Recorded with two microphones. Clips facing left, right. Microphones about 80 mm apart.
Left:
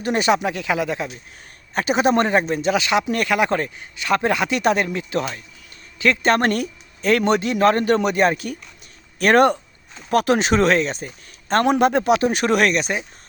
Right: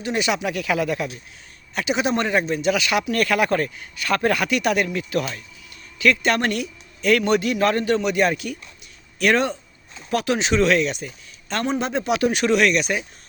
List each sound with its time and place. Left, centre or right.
0.0 s speech: left
1.7 s a man's voice: left
11.6 s speech: left